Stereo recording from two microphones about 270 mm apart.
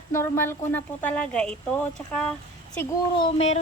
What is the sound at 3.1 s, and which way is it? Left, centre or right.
Speech, centre.